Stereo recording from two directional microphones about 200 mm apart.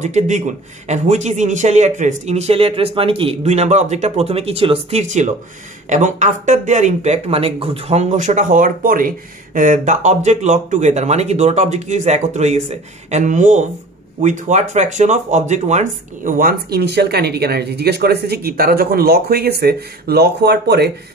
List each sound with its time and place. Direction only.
0.0 s speech: 35° right (ahead or behind); by 20.9 s 55° right (ahead or behind)